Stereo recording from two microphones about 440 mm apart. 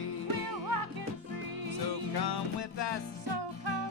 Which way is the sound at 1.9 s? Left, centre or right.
Left.